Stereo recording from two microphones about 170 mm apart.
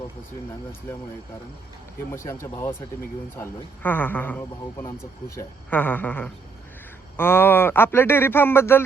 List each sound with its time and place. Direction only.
2.1 s speech: 15° left (ahead or behind)